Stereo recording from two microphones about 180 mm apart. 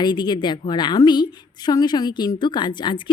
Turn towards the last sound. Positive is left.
turn(degrees=25)  # may be behind; listen again after turning